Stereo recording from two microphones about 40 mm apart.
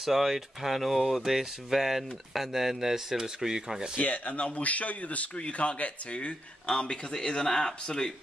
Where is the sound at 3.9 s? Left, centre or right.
Left; by 8.1 s centre.